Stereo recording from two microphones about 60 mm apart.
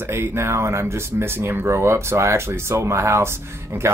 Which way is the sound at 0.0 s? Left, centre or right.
Right.